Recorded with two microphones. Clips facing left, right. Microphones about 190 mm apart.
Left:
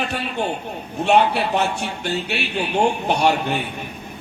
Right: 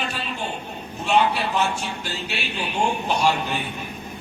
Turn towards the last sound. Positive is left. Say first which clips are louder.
# left 3 dB
turn(degrees=65)  # may be behind; listen again after turning